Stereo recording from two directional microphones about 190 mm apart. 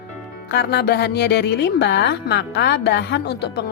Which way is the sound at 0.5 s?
60° left (ahead or behind).